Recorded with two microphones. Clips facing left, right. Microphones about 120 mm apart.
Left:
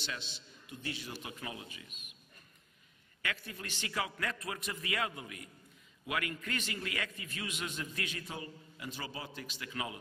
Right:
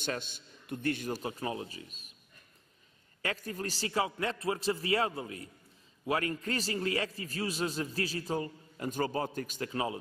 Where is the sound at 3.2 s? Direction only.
40° right (ahead or behind).